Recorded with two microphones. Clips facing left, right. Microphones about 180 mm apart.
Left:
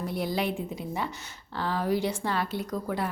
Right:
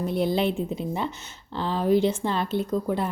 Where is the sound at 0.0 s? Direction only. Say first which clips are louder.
Right 6 dB; 25° right (ahead or behind).